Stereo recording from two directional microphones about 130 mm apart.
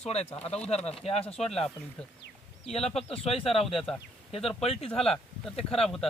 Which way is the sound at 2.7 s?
50° left (ahead or behind).